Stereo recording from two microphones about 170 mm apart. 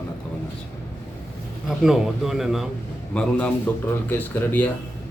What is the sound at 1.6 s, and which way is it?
A man's voice, 5° right (ahead or behind).